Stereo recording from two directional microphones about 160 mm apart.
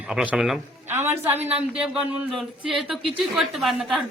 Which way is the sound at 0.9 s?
15° right (ahead or behind).